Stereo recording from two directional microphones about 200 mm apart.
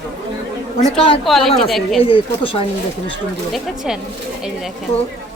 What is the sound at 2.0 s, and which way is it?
Speech, 25° left (ahead or behind).